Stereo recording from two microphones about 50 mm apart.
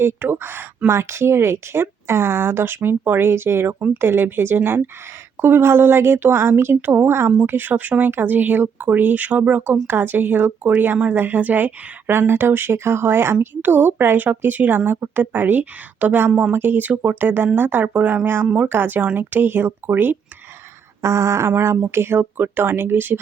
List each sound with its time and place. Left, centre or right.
0.0 s speech: right
0.9 s speech: right
7.4 s speech: right
9.8 s speech: right
12.0 s speech: right
13.4 s speech: right
17.9 s speech: right
18.6 s speech: right
21.0 s a sound: right
21.4 s speech: right